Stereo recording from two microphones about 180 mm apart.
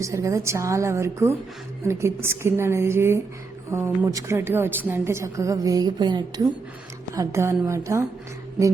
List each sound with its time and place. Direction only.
0.0 s a woman's voice: 15° right (ahead or behind)